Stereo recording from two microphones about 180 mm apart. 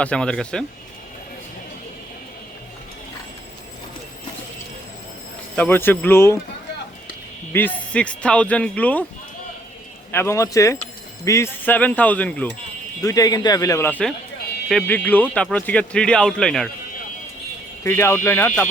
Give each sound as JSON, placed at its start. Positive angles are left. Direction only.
{"t": 0.0, "sound": "speech", "side_deg": 5}
{"t": 5.5, "sound": "speech", "side_deg": 10}
{"t": 7.5, "sound": "speech", "side_deg": 10}
{"t": 10.1, "sound": "speech", "side_deg": 15}
{"t": 13.0, "sound": "speech", "side_deg": 20}
{"t": 17.8, "sound": "speech", "side_deg": 15}